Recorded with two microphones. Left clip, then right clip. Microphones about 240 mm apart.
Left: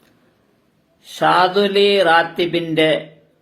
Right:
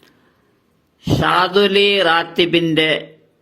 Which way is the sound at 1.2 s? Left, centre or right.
Right.